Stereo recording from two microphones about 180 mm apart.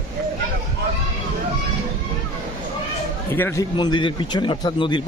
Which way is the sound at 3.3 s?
10° left (ahead or behind).